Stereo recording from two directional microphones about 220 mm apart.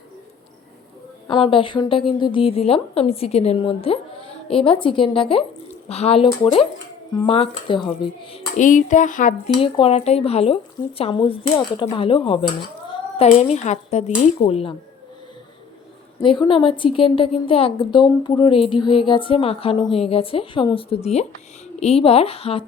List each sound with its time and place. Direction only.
1.3 s a woman's voice: 25° left (ahead or behind)
8.5 s speech: 35° left (ahead or behind)
9.6 s a woman's voice: 25° left (ahead or behind)
16.2 s a woman's voice: 20° left (ahead or behind)